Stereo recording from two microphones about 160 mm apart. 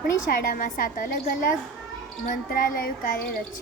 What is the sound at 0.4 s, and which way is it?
A woman's voice, 60° left (ahead or behind).